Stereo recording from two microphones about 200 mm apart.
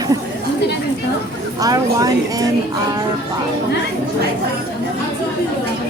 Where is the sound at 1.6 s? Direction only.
20° right (ahead or behind).